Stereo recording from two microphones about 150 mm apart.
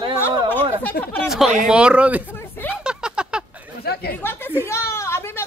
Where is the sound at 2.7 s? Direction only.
5° right (ahead or behind).